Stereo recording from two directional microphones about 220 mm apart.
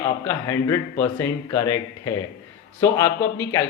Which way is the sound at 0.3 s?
10° left (ahead or behind).